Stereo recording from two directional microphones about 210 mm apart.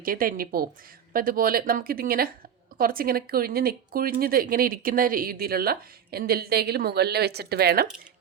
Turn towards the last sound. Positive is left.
turn(degrees=-50)  # may be behind; listen again after turning